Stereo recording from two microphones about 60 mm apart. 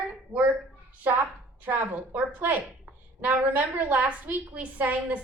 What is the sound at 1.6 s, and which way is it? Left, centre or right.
A woman's voice, right.